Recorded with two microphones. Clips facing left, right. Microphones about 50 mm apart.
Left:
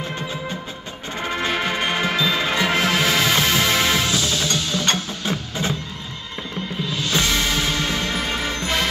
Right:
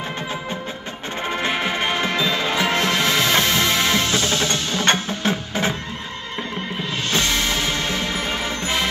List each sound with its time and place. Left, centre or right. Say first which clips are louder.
1.2 s music: even; centre
4.1 s music: right 1 dB; right
7.2 s music: even; centre